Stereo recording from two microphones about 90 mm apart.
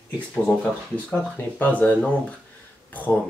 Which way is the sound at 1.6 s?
15° left (ahead or behind).